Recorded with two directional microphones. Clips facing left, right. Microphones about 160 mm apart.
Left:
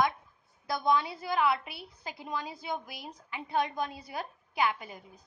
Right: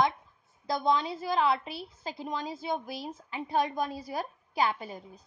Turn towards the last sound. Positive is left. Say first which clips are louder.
# right 1 dB
turn(degrees=-35)  # may be behind; listen again after turning